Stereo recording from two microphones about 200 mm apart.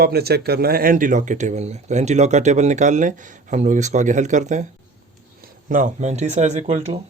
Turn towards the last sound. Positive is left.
turn(degrees=-35)  # may be behind; listen again after turning